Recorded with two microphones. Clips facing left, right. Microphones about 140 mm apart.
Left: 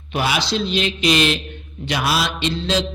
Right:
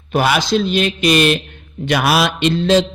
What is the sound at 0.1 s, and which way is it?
A man's voice, 50° right (ahead or behind).